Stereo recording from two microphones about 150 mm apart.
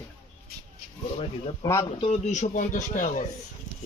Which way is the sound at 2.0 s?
50° left (ahead or behind).